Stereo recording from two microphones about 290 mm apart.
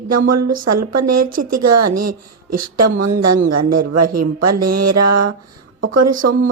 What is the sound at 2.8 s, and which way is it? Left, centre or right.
A woman's voice, right.